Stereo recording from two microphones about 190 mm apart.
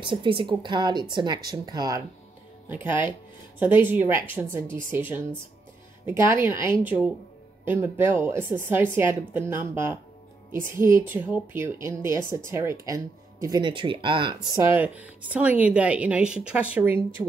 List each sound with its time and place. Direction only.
0.0 s speech: 25° right (ahead or behind)
14.8 s speech: 10° right (ahead or behind)